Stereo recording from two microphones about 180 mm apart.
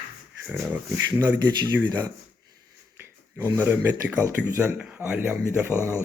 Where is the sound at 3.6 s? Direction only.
10° right (ahead or behind).